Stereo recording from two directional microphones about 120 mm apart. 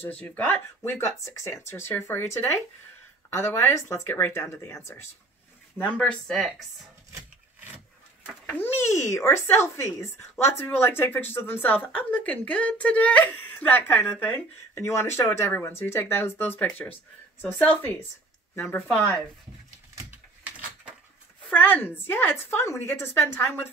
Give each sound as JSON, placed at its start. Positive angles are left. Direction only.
{"t": 0.1, "sound": "speech", "side_deg": 10}
{"t": 5.8, "sound": "speech", "side_deg": 10}
{"t": 8.5, "sound": "speech", "side_deg": 15}
{"t": 18.9, "sound": "speech", "side_deg": 5}
{"t": 20.0, "sound": "a sound", "side_deg": -15}
{"t": 21.5, "sound": "speech", "side_deg": 15}